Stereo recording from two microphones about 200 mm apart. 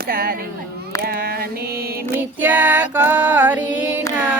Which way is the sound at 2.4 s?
10° right (ahead or behind).